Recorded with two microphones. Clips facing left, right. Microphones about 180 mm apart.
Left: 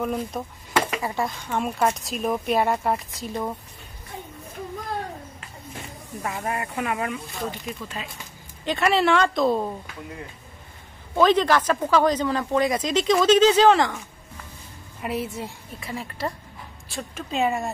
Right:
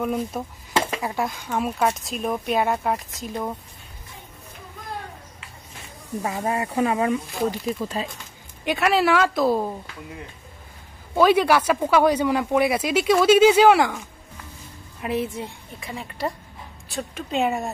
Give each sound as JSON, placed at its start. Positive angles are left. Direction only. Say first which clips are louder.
{"t": 0.0, "sound": "speech", "louder": "right 2 dB", "side_deg": -5}
{"t": 0.7, "sound": "a sound", "louder": "even", "side_deg": -30}
{"t": 1.0, "sound": "speech", "louder": "right 1 dB", "side_deg": 0}
{"t": 6.2, "sound": "speech", "louder": "right 3 dB", "side_deg": -25}
{"t": 8.6, "sound": "speech", "louder": "right 1 dB", "side_deg": 0}
{"t": 11.1, "sound": "speech", "louder": "right 1 dB", "side_deg": -10}